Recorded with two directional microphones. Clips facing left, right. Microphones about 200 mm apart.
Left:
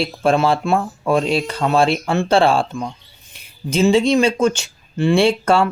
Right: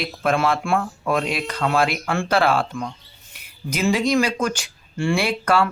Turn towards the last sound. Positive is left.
turn(degrees=25)  # may be behind; listen again after turning